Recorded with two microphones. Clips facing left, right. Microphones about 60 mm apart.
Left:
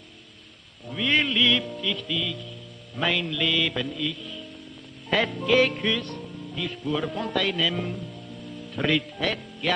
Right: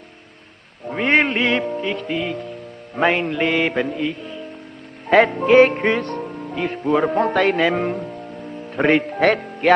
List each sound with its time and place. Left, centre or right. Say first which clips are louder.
0.8 s music: right 7 dB; right